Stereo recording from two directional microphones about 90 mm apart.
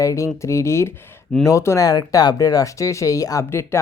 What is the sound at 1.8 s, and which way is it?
Speech, 45° left (ahead or behind).